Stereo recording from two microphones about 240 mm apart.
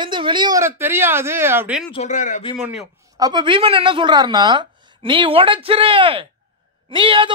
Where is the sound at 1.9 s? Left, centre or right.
Left.